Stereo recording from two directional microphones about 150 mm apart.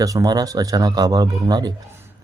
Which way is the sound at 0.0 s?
25° right (ahead or behind).